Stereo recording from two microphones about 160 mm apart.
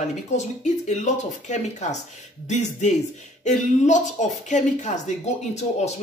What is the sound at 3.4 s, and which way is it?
Speech, 50° left (ahead or behind).